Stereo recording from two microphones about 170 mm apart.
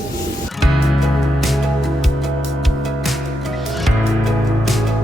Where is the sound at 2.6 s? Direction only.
Centre (ahead or behind).